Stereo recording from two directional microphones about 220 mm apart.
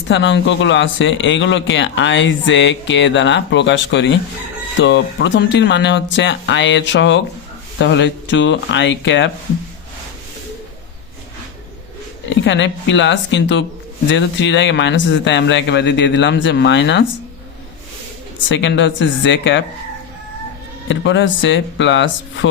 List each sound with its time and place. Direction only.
0.1 s speech: 55° left (ahead or behind)
12.3 s speech: 55° left (ahead or behind)
18.4 s speech: 55° left (ahead or behind)
20.8 s speech: 55° left (ahead or behind)